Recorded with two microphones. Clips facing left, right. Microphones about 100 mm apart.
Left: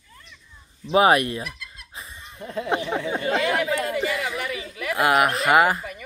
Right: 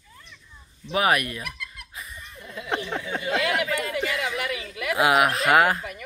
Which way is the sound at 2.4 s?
45° left (ahead or behind).